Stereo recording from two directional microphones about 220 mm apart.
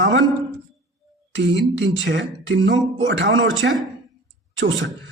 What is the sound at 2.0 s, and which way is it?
Speech, 55° right (ahead or behind).